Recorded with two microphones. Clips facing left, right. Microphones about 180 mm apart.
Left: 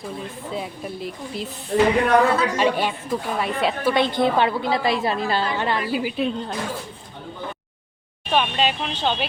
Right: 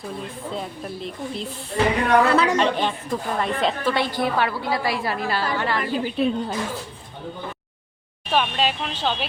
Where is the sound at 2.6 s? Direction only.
10° left (ahead or behind).